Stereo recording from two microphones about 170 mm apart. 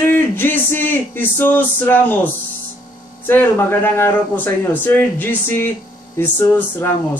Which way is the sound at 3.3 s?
10° left (ahead or behind).